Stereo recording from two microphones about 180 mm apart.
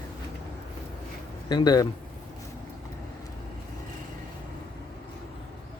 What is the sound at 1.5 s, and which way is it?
Speech, 25° left (ahead or behind).